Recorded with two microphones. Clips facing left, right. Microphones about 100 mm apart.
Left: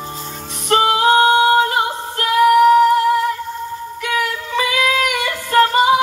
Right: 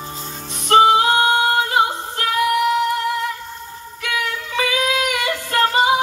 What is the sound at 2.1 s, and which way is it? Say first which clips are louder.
Female singing: left 8 dB; 40° left (ahead or behind).